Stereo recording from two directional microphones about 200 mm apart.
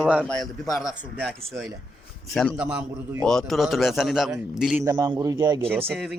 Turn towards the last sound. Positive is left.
turn(degrees=0)  # may be behind; listen again after turning